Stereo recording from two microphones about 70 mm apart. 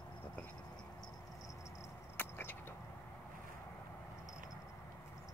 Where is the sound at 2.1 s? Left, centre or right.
Left.